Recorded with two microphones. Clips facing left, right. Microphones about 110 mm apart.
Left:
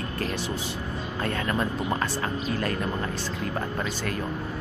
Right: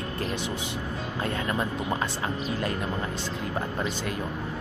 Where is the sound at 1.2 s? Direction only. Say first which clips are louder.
Left 2 dB; 20° right (ahead or behind).